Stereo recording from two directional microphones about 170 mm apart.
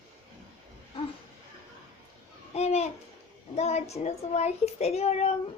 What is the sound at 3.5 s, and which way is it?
A child's voice, 40° left (ahead or behind).